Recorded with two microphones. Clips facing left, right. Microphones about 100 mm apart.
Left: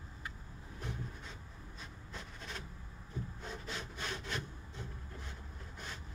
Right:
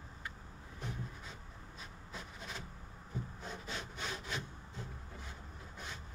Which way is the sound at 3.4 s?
Centre (ahead or behind).